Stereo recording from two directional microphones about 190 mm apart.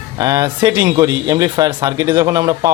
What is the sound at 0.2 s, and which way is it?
A man's voice, 15° right (ahead or behind).